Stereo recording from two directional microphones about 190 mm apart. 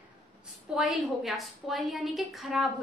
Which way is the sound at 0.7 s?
Centre (ahead or behind).